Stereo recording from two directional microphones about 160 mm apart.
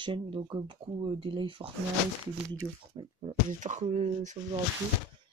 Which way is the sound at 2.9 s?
30° right (ahead or behind).